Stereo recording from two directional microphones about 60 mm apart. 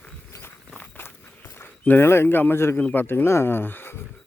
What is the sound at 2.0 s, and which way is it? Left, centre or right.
Speech, left.